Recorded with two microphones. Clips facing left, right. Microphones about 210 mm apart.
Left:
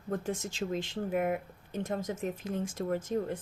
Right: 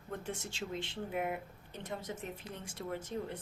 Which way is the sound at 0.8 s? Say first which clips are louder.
Left 6 dB; 45° left (ahead or behind).